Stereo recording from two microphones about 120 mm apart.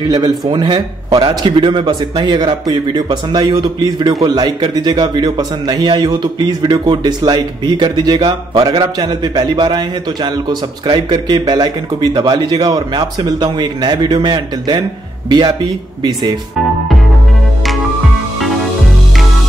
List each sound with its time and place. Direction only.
0.5 s a man's voice: 40° right (ahead or behind)
18.4 s music: centre (ahead or behind)